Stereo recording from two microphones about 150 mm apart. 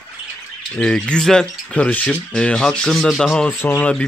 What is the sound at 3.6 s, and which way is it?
Speech, 10° left (ahead or behind).